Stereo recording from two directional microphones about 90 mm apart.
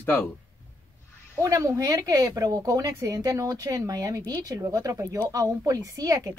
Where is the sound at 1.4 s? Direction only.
40° right (ahead or behind).